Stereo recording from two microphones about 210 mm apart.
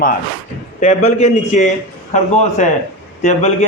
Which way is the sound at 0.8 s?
35° left (ahead or behind).